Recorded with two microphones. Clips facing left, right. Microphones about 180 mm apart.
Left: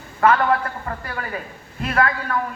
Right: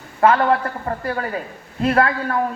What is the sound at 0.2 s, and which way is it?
A man's voice, 30° right (ahead or behind).